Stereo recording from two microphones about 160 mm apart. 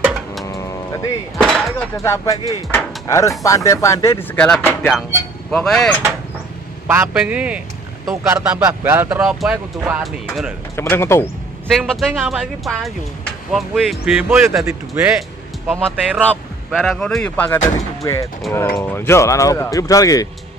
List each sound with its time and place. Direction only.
0.0 s livestock: 5° right (ahead or behind)
0.5 s cattle: 20° left (ahead or behind)
1.4 s speech: centre (ahead or behind)
1.8 s speech: 20° left (ahead or behind)
4.4 s speech: 5° left (ahead or behind)
6.9 s speech: 10° right (ahead or behind)
8.3 s speech: 15° right (ahead or behind)
10.8 s speech: 15° left (ahead or behind)
11.7 s speech: centre (ahead or behind)
15.8 s speech: 5° left (ahead or behind)
18.0 s speech: 20° left (ahead or behind)